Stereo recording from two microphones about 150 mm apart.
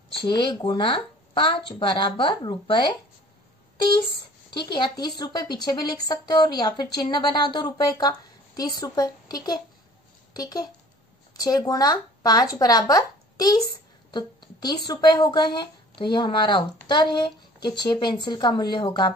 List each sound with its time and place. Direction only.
0.3 s speech: 30° left (ahead or behind)
4.7 s a woman's voice: 30° left (ahead or behind)